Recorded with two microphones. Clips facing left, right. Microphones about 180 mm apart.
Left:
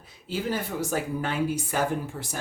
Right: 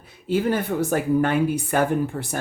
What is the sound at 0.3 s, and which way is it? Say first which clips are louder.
Speech: right 8 dB; 60° right (ahead or behind).